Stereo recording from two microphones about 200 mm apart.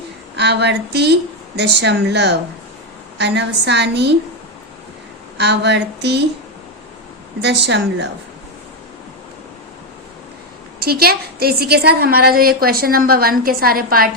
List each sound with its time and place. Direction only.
0.3 s a woman's voice: 60° right (ahead or behind)
5.4 s a woman's voice: 60° right (ahead or behind)
7.4 s a woman's voice: 60° right (ahead or behind)
10.8 s a woman's voice: 50° right (ahead or behind)